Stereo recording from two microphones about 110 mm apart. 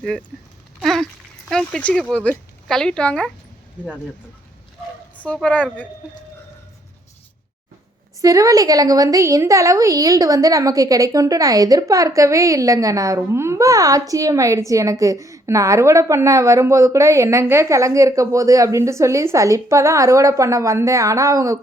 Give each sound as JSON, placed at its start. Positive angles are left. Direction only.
{"t": 0.0, "sound": "a woman's voice", "side_deg": 5}
{"t": 0.8, "sound": "a sound", "side_deg": 0}
{"t": 1.5, "sound": "a woman's voice", "side_deg": 5}
{"t": 5.1, "sound": "a woman's voice", "side_deg": 15}
{"t": 8.2, "sound": "a woman's voice", "side_deg": -30}